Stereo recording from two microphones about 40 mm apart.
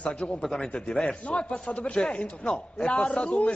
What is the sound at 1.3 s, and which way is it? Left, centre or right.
A man's voice, left.